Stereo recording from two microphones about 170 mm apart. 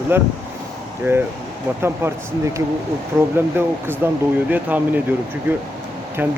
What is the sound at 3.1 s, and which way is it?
Speech, 15° right (ahead or behind).